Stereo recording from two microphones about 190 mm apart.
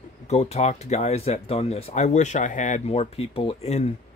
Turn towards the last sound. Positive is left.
turn(degrees=35)  # may be behind; listen again after turning